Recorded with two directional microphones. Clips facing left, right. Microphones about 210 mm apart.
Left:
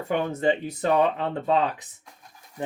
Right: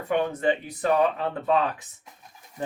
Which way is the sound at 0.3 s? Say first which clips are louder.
Left 1 dB; 25° left (ahead or behind).